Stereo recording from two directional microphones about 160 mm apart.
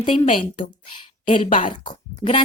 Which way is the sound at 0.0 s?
30° left (ahead or behind).